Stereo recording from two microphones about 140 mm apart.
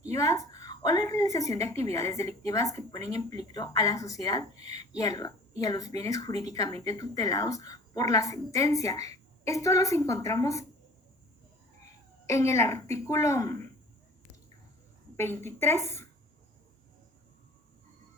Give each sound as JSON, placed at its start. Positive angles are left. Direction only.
{"t": 0.1, "sound": "speech", "side_deg": 20}
{"t": 4.5, "sound": "a woman's voice", "side_deg": -50}
{"t": 4.9, "sound": "speech", "side_deg": 25}
{"t": 12.2, "sound": "speech", "side_deg": 20}
{"t": 15.1, "sound": "a woman's voice", "side_deg": 15}